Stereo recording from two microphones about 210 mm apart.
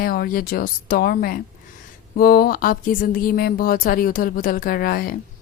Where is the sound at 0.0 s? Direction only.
45° left (ahead or behind).